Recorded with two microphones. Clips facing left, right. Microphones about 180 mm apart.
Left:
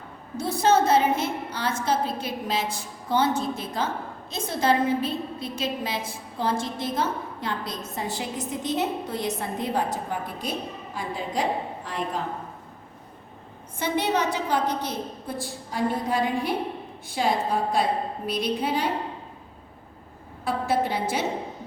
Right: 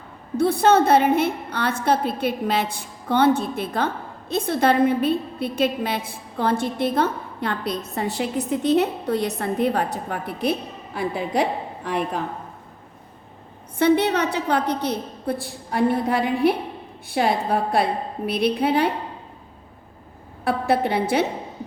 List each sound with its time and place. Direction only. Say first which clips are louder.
0.3 s a woman's voice: right 5 dB; 60° right (ahead or behind)
13.7 s a woman's voice: right 7 dB; 65° right (ahead or behind)
20.4 s a woman's voice: right 4 dB; 60° right (ahead or behind)